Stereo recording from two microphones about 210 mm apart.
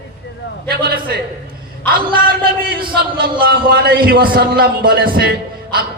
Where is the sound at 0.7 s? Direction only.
45° right (ahead or behind).